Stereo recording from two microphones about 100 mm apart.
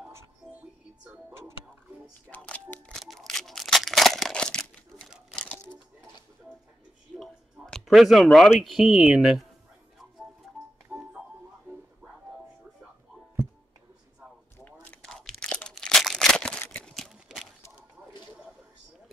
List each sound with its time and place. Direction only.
2.2 s speech: 15° left (ahead or behind)
2.9 s scissors: 5° left (ahead or behind)
7.2 s a sound: centre (ahead or behind)
8.5 s speech: 5° right (ahead or behind)
10.4 s music: 5° right (ahead or behind)
10.9 s tick-tock: 10° right (ahead or behind)
14.6 s a sound: 15° left (ahead or behind)
15.0 s crumpling: 5° left (ahead or behind)
16.7 s a sound: 5° left (ahead or behind)